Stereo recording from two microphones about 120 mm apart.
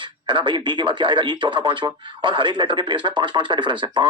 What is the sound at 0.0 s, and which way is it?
Speech, 40° right (ahead or behind).